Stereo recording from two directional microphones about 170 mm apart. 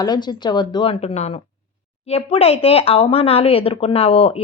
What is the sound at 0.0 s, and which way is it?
A woman's voice, 25° left (ahead or behind).